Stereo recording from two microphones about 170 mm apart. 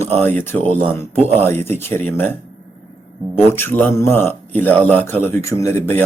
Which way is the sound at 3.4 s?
15° left (ahead or behind).